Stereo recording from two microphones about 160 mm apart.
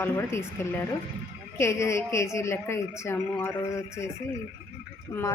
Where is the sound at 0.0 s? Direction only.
15° left (ahead or behind).